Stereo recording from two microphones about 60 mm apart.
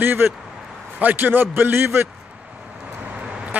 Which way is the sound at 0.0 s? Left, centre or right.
Right.